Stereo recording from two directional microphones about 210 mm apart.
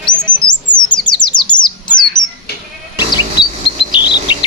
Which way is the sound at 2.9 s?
20° left (ahead or behind).